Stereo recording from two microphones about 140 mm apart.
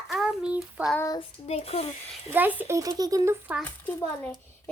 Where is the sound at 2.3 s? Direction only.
15° right (ahead or behind).